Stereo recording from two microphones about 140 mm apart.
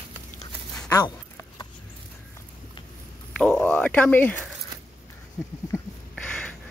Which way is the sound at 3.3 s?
10° left (ahead or behind).